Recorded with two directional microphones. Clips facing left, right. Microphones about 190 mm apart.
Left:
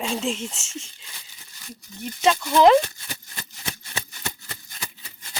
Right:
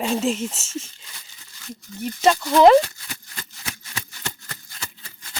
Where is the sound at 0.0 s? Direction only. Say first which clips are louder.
Right 4 dB; 5° right (ahead or behind).